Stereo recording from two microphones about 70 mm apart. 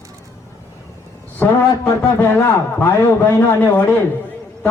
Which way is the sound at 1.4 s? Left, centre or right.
Left.